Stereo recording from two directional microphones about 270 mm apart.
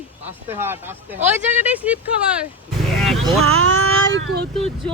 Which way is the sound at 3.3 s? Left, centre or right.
Right.